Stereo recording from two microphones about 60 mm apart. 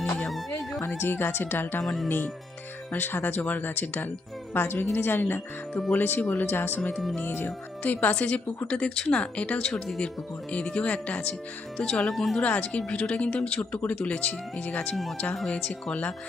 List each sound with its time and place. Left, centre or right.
0.5 s music: left
0.9 s speech: left
1.8 s speech: centre
2.0 s a woman's voice: left; by 12.0 s centre
12.0 s speech: centre
12.4 s a woman's voice: left